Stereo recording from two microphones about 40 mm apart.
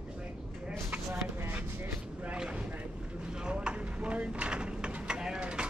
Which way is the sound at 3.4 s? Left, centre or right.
Right.